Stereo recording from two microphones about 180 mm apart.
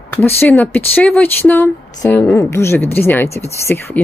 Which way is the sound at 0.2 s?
10° left (ahead or behind).